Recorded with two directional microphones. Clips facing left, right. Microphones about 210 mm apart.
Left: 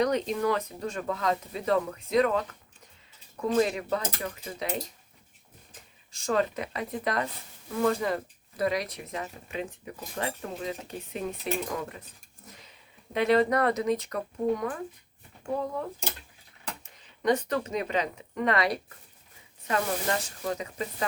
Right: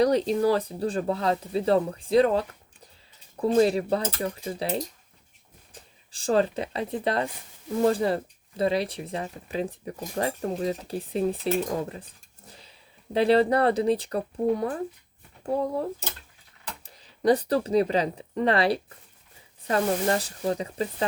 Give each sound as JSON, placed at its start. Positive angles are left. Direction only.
{"t": 0.0, "sound": "speech", "side_deg": -35}
{"t": 6.1, "sound": "speech", "side_deg": -30}
{"t": 12.5, "sound": "a sound", "side_deg": -30}
{"t": 13.1, "sound": "speech", "side_deg": -30}